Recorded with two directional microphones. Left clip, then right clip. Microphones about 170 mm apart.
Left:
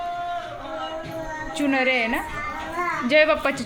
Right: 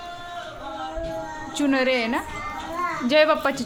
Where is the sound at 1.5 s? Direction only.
20° right (ahead or behind).